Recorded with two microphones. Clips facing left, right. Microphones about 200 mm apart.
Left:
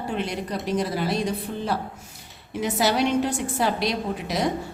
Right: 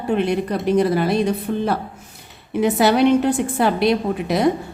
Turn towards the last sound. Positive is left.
turn(degrees=-60)  # may be behind; listen again after turning